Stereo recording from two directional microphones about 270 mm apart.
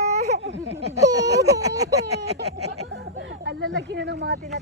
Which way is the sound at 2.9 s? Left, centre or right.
Right.